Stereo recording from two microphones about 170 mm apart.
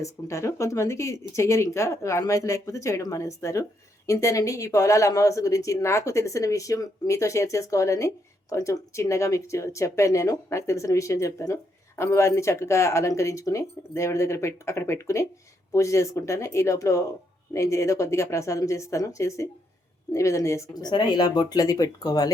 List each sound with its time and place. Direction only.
0.0 s speech: 15° left (ahead or behind)